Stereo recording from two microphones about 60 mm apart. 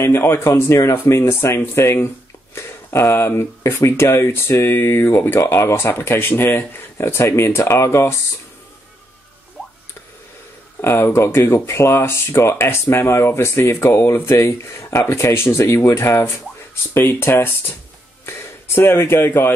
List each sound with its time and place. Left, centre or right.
0.0 s speech: left
0.5 s speech: left
4.7 s speech: left
5.4 s speech: left
10.8 s speech: left
18.8 s speech: left